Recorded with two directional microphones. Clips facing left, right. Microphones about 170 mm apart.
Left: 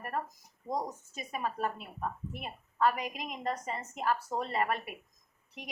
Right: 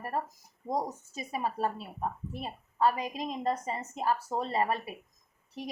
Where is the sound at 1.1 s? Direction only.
30° right (ahead or behind).